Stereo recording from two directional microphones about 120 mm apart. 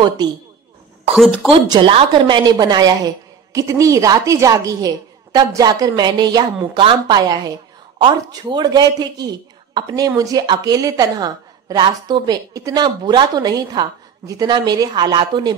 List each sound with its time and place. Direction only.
0.2 s a woman's voice: 35° right (ahead or behind)
1.1 s a woman's voice: centre (ahead or behind)
1.9 s a woman's voice: 60° right (ahead or behind)
2.2 s a woman's voice: 35° right (ahead or behind)